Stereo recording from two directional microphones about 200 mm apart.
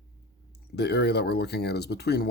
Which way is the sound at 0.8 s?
55° left (ahead or behind).